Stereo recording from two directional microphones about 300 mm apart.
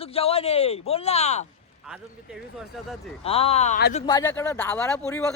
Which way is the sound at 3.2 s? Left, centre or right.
Centre.